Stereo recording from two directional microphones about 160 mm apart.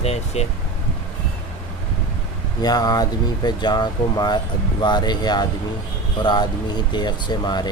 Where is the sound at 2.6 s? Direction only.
25° left (ahead or behind).